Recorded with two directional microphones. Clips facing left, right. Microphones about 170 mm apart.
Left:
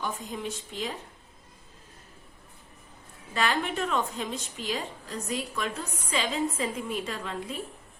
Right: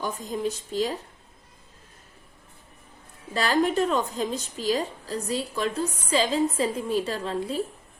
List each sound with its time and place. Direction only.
0.0 s a woman's voice: 40° right (ahead or behind)
3.3 s a woman's voice: 35° right (ahead or behind)